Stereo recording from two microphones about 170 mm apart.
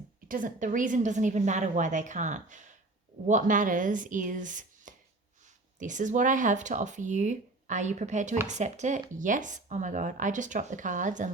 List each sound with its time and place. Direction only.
0.3 s speech: 50° right (ahead or behind)